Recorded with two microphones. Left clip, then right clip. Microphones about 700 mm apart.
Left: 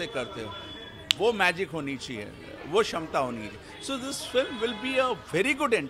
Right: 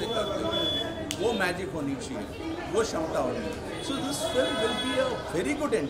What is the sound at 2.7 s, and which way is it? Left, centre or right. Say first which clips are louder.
Speech: left 2 dB; left.